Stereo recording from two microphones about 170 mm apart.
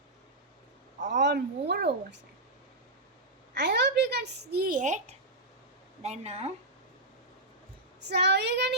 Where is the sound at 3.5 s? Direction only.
85° right; by 5.1 s 45° right (ahead or behind).